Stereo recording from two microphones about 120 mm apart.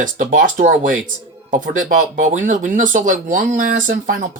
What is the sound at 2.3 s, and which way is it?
Speech, 90° right.